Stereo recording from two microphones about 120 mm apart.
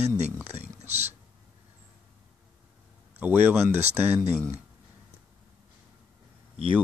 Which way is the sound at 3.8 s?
65° right (ahead or behind).